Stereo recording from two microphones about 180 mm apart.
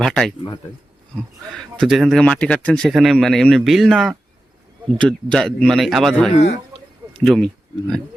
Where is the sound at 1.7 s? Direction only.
Centre (ahead or behind).